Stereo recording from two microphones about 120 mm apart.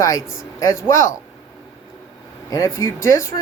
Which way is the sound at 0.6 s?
25° left (ahead or behind).